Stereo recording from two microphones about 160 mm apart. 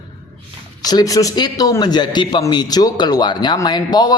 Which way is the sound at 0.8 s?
25° left (ahead or behind).